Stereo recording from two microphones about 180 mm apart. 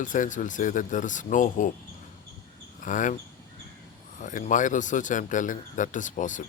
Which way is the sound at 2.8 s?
45° left (ahead or behind).